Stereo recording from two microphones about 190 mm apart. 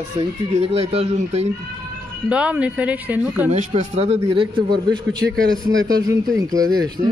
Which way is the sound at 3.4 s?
40° right (ahead or behind).